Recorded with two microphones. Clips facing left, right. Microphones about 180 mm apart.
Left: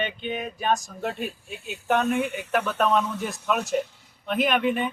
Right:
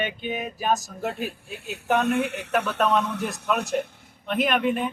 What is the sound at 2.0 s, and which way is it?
Speech, 75° right (ahead or behind).